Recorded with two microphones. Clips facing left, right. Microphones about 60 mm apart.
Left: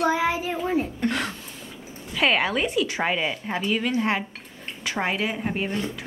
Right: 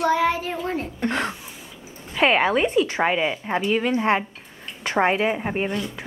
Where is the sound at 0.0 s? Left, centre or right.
Centre.